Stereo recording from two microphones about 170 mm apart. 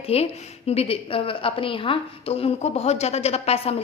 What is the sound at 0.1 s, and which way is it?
A woman's voice, 35° left (ahead or behind).